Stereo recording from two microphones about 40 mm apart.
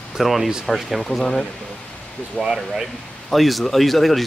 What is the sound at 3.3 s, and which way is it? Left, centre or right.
Speech, centre.